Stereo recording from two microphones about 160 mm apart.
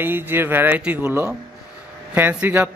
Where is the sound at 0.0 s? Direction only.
15° right (ahead or behind).